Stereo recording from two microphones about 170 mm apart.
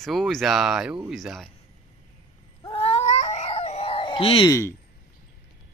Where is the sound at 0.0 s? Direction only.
Centre (ahead or behind).